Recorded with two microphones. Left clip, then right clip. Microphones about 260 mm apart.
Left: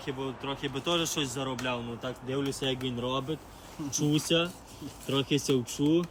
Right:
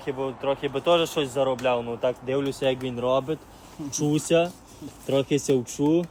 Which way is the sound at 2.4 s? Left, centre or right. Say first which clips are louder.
Right 7 dB; right.